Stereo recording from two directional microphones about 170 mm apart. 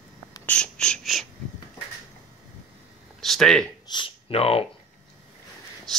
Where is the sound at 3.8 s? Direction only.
30° left (ahead or behind).